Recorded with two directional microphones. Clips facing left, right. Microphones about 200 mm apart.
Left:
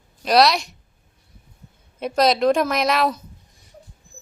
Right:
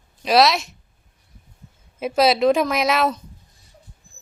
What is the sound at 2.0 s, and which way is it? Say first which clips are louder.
A woman's voice: right 1 dB; 5° right (ahead or behind).